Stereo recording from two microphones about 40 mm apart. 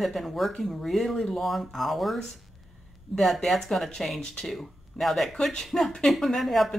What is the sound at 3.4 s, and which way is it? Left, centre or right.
Speech, centre.